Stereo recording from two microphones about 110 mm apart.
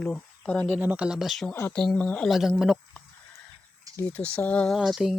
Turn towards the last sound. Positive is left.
turn(degrees=0)  # may be behind; listen again after turning